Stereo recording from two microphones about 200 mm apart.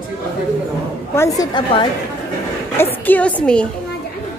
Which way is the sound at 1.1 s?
15° left (ahead or behind).